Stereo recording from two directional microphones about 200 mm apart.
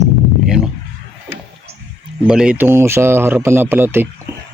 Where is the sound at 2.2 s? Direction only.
5° right (ahead or behind).